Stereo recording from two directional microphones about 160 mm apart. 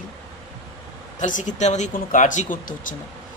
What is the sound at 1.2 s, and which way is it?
Speech, 50° left (ahead or behind).